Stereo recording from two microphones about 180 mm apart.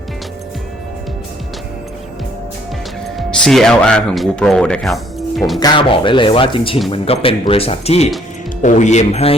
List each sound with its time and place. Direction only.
3.2 s speech: centre (ahead or behind)
5.5 s speech: 25° left (ahead or behind)